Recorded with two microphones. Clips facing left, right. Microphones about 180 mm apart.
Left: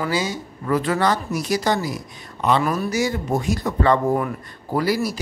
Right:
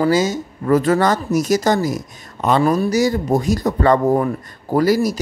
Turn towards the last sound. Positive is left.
turn(degrees=-40)  # may be behind; listen again after turning